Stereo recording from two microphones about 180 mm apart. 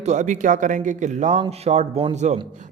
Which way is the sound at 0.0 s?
40° right (ahead or behind).